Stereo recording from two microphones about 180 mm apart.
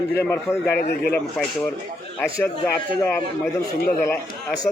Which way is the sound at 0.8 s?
60° left (ahead or behind).